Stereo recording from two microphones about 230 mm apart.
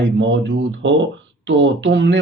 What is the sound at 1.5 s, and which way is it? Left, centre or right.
Speech, right.